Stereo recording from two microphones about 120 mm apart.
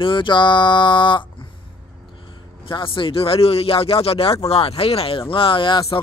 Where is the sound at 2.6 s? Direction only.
45° left (ahead or behind).